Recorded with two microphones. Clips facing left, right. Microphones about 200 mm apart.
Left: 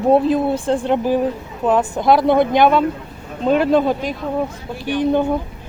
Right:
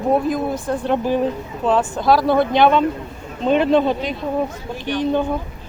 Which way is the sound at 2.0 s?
20° left (ahead or behind).